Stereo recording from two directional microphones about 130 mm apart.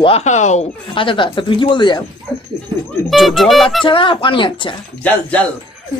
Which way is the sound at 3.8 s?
40° left (ahead or behind).